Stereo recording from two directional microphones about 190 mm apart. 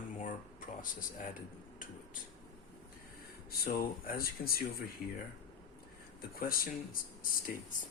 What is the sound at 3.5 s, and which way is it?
Speech, 50° left (ahead or behind).